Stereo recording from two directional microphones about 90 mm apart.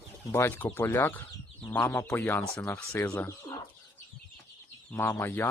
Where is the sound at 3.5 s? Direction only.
65° left (ahead or behind).